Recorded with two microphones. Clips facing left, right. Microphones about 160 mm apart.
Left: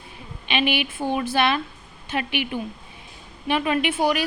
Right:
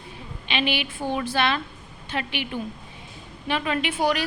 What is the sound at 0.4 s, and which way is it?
A woman's voice, 15° left (ahead or behind).